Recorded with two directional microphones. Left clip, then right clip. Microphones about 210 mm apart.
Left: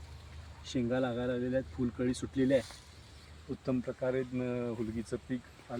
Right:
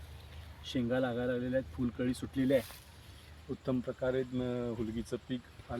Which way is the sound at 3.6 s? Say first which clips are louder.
Even; 5° left (ahead or behind).